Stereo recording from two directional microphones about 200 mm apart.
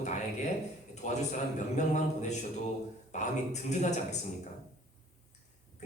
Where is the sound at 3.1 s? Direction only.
35° left (ahead or behind).